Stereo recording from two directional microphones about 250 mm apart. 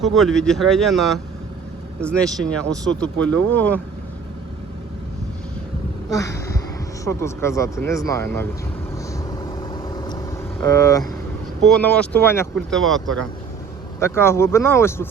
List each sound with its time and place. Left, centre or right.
0.0 s speech: centre
6.1 s a sound: centre
7.0 s speech: centre
9.4 s vehicle: centre
10.6 s speech: centre